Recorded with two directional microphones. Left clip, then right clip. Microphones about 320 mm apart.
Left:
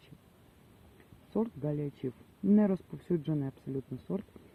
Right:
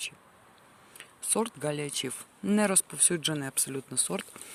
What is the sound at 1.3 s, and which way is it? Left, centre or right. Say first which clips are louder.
Speech: right 4 dB; right.